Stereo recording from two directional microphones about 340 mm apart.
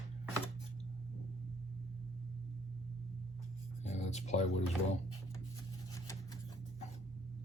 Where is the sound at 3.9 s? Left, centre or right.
Centre.